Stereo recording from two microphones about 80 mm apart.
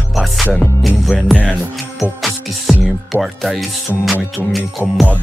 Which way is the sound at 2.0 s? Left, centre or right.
Centre.